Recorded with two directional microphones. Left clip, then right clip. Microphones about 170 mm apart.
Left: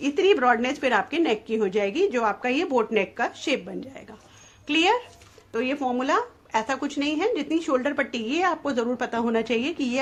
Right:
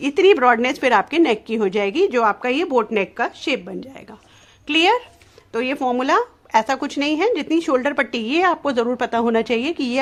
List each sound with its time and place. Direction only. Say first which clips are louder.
0.0 s speech: right 6 dB; 45° right (ahead or behind)